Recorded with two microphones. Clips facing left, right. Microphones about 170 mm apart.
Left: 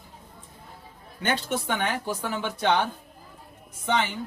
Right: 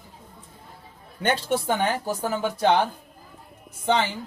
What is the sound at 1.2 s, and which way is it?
Speech, 40° right (ahead or behind).